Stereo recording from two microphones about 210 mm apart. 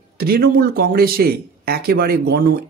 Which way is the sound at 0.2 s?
45° right (ahead or behind).